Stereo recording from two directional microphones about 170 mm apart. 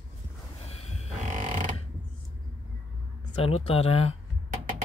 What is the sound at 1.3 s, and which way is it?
Mechanisms, 50° right (ahead or behind).